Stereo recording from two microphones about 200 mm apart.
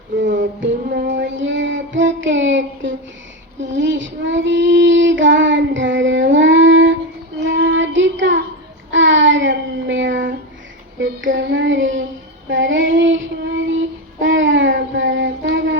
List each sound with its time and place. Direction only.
0.3 s child singing: 65° right (ahead or behind)